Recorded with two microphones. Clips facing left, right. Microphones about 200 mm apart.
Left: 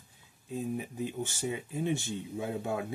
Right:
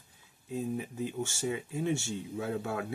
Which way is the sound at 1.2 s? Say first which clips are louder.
Right 1 dB; 15° left (ahead or behind).